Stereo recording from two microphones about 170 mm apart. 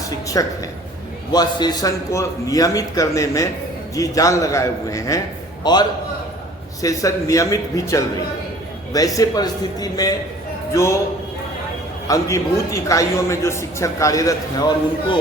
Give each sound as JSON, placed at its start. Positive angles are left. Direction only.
{"t": 0.4, "sound": "a man's voice", "side_deg": 20}
{"t": 6.8, "sound": "a man's voice", "side_deg": 20}
{"t": 12.0, "sound": "a man's voice", "side_deg": 20}